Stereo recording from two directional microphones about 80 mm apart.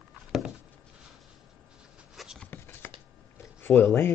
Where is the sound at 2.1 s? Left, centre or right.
Centre.